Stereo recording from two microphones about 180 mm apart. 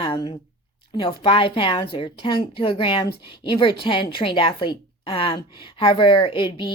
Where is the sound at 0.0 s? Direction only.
25° left (ahead or behind).